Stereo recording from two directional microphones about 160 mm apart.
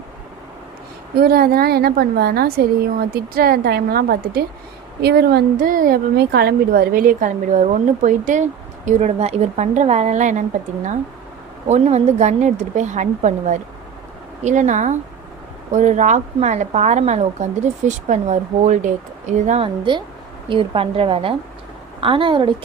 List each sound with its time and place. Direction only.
1.1 s a woman's voice: 70° right (ahead or behind)
5.0 s a woman's voice: 85° right; by 10.4 s 50° right (ahead or behind)
11.7 s a woman's voice: 45° right (ahead or behind)
19.6 s a woman's voice: 30° right (ahead or behind)